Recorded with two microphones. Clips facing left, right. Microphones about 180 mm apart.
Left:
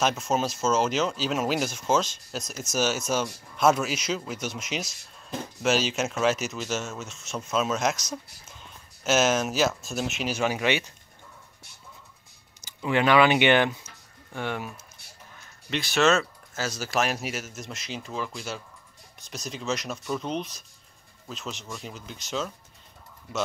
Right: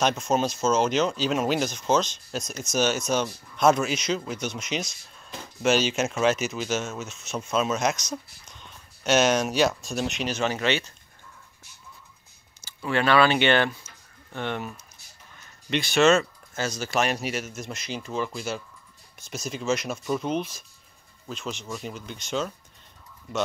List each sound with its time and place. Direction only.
0.0 s speech: 5° left (ahead or behind)
12.6 s speech: 15° left (ahead or behind); by 22.5 s centre (ahead or behind)